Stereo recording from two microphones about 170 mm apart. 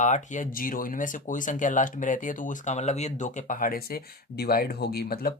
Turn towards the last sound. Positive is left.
turn(degrees=65)  # may be behind; listen again after turning